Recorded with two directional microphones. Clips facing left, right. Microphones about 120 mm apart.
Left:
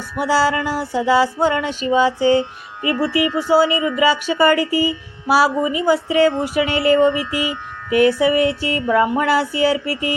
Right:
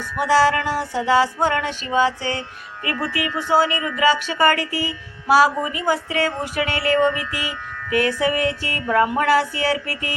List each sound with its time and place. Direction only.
0.2 s speech: 10° left (ahead or behind)